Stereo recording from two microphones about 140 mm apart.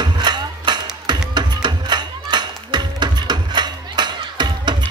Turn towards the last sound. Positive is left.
turn(degrees=-30)  # may be behind; listen again after turning